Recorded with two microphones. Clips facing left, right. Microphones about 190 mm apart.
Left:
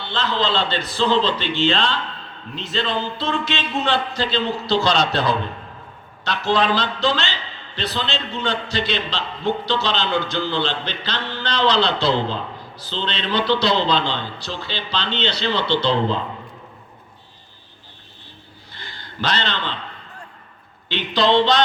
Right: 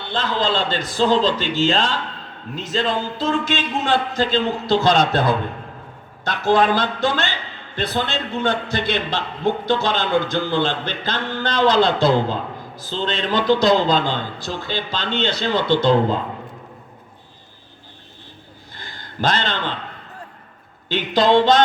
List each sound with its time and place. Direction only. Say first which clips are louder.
0.0 s a man's voice: right 1 dB; 50° right (ahead or behind)
18.7 s a sound: even; 45° right (ahead or behind)
20.9 s a man's voice: right 2 dB; 45° right (ahead or behind)